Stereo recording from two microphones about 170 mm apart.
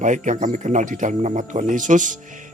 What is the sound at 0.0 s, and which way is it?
Speech, 50° right (ahead or behind).